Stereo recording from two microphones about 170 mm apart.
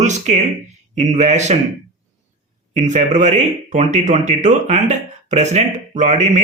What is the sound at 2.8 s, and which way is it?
Speech, 45° right (ahead or behind).